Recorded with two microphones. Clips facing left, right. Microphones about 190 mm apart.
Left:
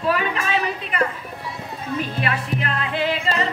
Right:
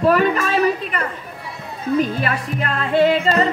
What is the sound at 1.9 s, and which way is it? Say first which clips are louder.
Music: right 5 dB; 40° right (ahead or behind).